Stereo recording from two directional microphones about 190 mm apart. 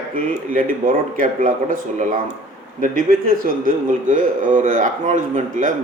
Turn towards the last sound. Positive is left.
turn(degrees=-40)  # may be behind; listen again after turning